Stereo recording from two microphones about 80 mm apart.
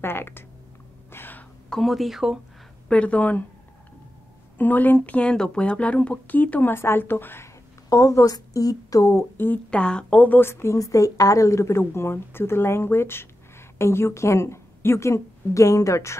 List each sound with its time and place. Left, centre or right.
0.0 s speech: left
1.1 s throat clearing: left
1.7 s speech: centre
2.9 s speech: centre
4.6 s a woman's voice: left
9.7 s a woman's voice: centre; by 16.2 s left